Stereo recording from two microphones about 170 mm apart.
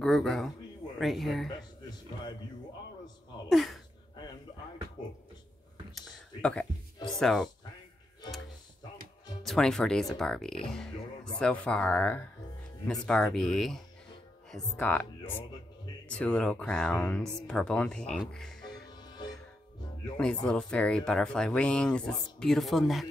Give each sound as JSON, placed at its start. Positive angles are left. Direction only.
{"t": 0.0, "sound": "speech", "side_deg": 5}
{"t": 3.4, "sound": "a sound", "side_deg": 0}
{"t": 5.9, "sound": "a sound", "side_deg": 5}
{"t": 7.1, "sound": "speech", "side_deg": 5}
{"t": 9.4, "sound": "speech", "side_deg": 0}
{"t": 18.7, "sound": "music", "side_deg": 25}
{"t": 20.2, "sound": "speech", "side_deg": 5}